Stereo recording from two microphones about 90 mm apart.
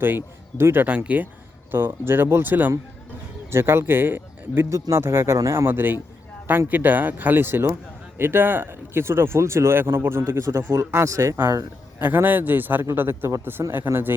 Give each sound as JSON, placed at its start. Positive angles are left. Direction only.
{"t": 0.0, "sound": "speech", "side_deg": -25}
{"t": 11.3, "sound": "speech", "side_deg": -25}